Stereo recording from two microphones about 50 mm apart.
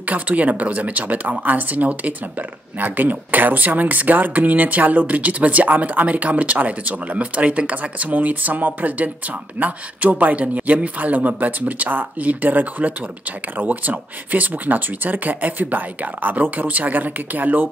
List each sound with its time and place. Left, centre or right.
0.0 s speech: right